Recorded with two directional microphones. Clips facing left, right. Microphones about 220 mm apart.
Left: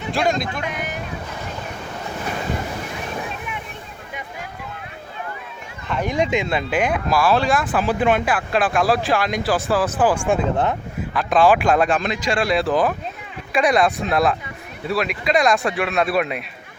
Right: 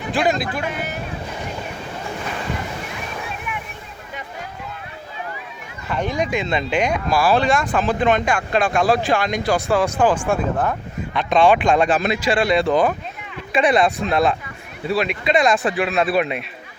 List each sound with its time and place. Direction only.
0.1 s speech: centre (ahead or behind)
6.1 s speech: 20° left (ahead or behind)
6.4 s speech: 5° left (ahead or behind)
10.2 s speech: 20° left (ahead or behind)
11.1 s speech: centre (ahead or behind)
11.9 s speech: 5° right (ahead or behind)